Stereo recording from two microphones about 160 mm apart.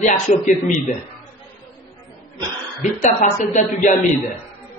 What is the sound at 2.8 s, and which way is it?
A woman's voice, 45° left (ahead or behind).